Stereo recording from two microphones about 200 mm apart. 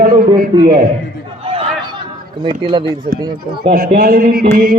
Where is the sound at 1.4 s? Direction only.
30° right (ahead or behind).